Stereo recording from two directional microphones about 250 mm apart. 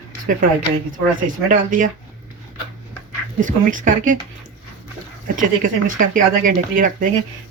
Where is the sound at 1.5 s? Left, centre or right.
Right.